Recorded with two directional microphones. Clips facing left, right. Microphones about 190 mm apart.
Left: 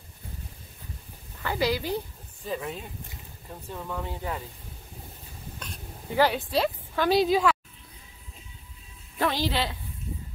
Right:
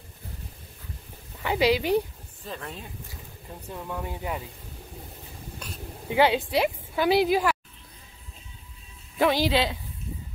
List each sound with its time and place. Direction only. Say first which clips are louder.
1.4 s speech: right 4 dB; 15° right (ahead or behind)
2.4 s speech: left 5 dB; 5° left (ahead or behind)
3.7 s speech: even; 10° right (ahead or behind)
5.6 s a woman's voice: right 4 dB; 15° right (ahead or behind)
9.2 s speech: right 4 dB; 15° right (ahead or behind)